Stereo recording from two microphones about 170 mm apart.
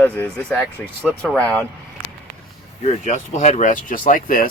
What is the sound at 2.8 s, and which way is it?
Speech, 45° left (ahead or behind).